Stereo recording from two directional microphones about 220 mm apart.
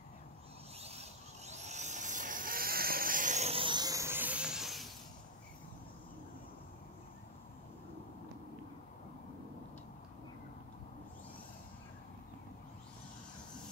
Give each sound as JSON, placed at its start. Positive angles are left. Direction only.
{"t": 0.7, "sound": "vehicle", "side_deg": -30}